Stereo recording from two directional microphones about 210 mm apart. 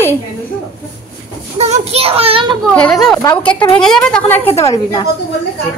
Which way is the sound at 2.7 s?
5° left (ahead or behind).